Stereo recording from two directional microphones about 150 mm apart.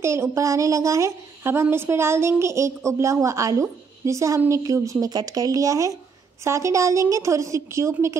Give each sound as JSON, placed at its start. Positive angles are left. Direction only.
{"t": 0.0, "sound": "a woman's voice", "side_deg": -20}